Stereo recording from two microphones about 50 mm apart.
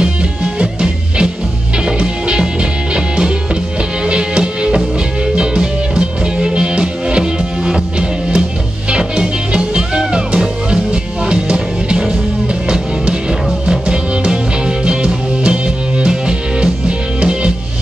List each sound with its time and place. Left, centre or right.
0.0 s music: centre